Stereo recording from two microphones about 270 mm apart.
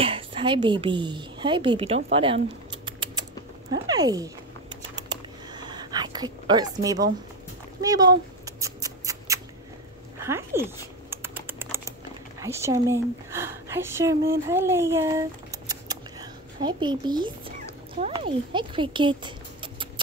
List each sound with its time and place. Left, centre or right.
0.0 s a woman's voice: centre
2.7 s rodents: centre
3.8 s typing: centre
7.8 s a sound: centre
10.2 s typing: centre
12.4 s a woman's voice: centre